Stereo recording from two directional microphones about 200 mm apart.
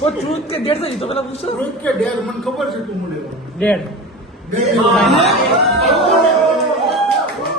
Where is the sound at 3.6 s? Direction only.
5° left (ahead or behind).